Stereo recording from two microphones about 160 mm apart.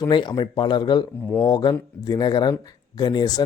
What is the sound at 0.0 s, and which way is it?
Speech, 30° left (ahead or behind).